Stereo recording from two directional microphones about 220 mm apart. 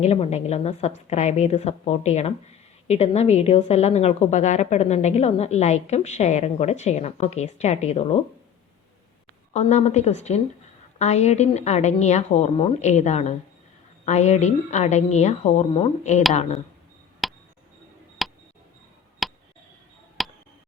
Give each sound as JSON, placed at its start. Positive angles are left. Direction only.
{"t": 0.0, "sound": "a woman's voice", "side_deg": 30}
{"t": 9.5, "sound": "a woman's voice", "side_deg": 30}
{"t": 17.2, "sound": "a sound", "side_deg": 0}